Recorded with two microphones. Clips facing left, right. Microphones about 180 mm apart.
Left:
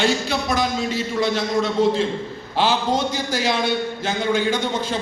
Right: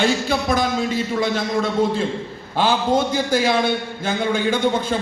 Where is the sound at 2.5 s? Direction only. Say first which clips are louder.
Right 2 dB; 50° right (ahead or behind).